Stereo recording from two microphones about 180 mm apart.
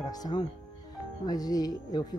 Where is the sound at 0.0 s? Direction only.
20° left (ahead or behind).